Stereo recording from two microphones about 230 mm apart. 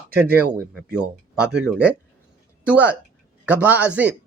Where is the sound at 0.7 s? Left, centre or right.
Centre.